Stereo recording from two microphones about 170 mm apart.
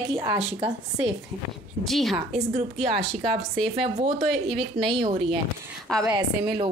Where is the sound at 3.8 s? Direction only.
35° right (ahead or behind).